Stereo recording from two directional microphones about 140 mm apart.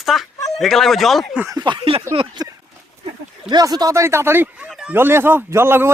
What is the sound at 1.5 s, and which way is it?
Speech, 35° right (ahead or behind).